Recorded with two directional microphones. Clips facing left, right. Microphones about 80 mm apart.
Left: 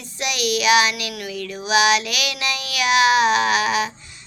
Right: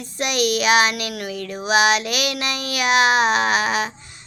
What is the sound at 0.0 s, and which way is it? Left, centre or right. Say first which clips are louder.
Child singing: right 3 dB; right.